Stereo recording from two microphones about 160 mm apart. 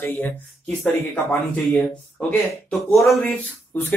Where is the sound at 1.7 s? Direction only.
10° left (ahead or behind).